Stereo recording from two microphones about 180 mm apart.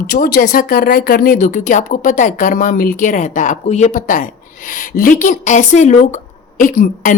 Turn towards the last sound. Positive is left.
turn(degrees=50)  # may be behind; listen again after turning